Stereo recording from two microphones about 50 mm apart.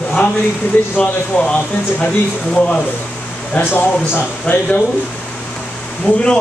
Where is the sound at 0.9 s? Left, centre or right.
Centre.